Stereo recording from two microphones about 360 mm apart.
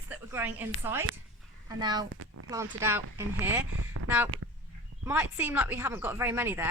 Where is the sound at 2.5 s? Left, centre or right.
Centre.